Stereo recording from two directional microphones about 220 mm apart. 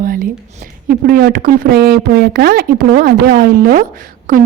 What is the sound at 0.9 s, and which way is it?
A woman's voice, 40° right (ahead or behind).